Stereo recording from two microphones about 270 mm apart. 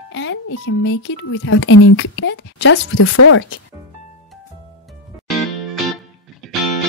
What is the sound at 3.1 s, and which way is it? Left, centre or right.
Speech, left.